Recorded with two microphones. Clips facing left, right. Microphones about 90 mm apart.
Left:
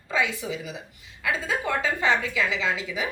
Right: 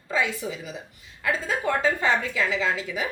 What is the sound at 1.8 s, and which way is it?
A woman's voice, 40° right (ahead or behind).